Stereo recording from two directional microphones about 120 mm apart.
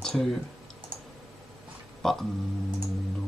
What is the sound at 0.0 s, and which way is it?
Speech, centre (ahead or behind).